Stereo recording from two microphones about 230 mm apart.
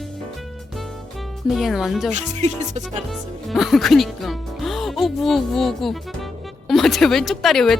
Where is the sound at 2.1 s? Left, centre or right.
Right.